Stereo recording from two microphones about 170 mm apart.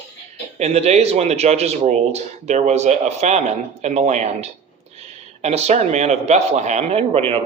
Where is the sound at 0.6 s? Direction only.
40° right (ahead or behind).